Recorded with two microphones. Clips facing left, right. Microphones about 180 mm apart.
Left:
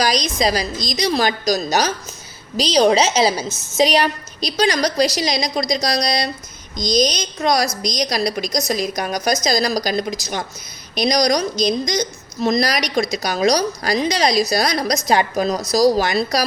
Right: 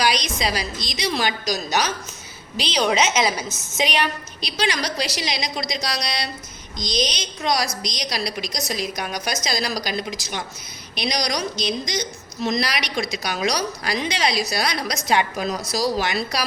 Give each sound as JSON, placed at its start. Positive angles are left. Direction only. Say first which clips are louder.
{"t": 0.0, "sound": "a woman's voice", "louder": "left 4 dB", "side_deg": 40}